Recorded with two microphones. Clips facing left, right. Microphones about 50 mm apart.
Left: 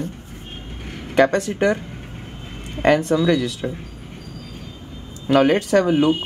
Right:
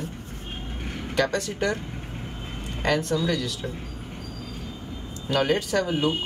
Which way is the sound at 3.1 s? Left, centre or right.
Left.